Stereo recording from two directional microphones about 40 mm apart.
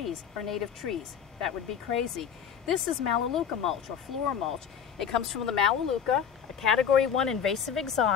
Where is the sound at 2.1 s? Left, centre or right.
Centre.